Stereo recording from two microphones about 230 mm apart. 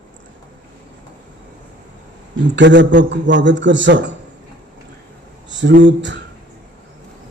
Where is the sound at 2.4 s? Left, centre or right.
Right.